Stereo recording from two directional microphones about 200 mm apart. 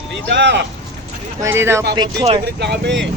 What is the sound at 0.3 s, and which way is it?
Speech, 60° right (ahead or behind).